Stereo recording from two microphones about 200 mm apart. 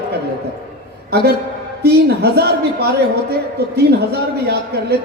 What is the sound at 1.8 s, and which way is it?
A man's voice, 55° right (ahead or behind).